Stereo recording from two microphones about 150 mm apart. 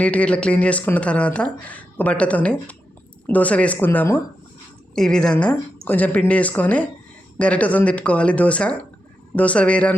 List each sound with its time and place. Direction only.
0.0 s speech: 10° left (ahead or behind)
4.9 s speech: 5° left (ahead or behind)